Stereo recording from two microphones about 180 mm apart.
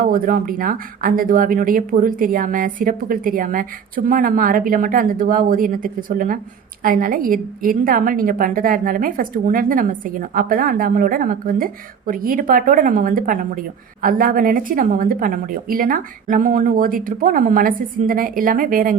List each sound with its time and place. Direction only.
0.0 s a woman's voice: 50° right (ahead or behind)